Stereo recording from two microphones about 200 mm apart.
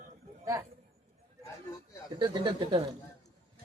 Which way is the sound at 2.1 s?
25° right (ahead or behind).